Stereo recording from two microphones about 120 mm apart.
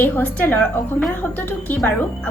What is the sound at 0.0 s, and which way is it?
A woman's voice, 15° left (ahead or behind).